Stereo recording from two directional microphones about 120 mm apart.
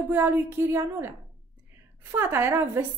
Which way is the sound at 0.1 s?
20° right (ahead or behind).